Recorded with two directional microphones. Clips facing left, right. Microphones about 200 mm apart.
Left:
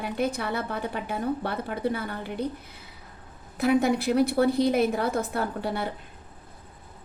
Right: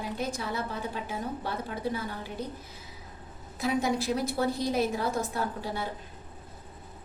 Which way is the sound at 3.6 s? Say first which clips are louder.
Left 6 dB; 60° left (ahead or behind).